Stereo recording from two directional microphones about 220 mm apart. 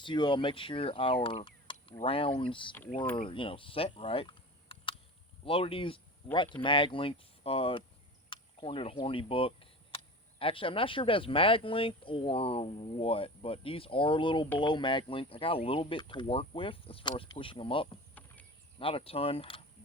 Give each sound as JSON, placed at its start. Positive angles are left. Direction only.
{"t": 0.0, "sound": "speech", "side_deg": 20}
{"t": 8.3, "sound": "a sound", "side_deg": 25}
{"t": 10.3, "sound": "speech", "side_deg": 25}